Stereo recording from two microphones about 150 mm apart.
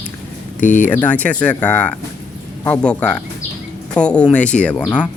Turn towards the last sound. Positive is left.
turn(degrees=10)  # may be behind; listen again after turning